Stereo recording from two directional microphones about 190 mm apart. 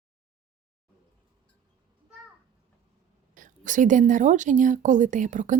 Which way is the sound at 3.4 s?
40° right (ahead or behind).